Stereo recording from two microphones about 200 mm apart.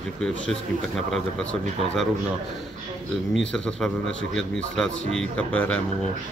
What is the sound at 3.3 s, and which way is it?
Speech, 5° left (ahead or behind).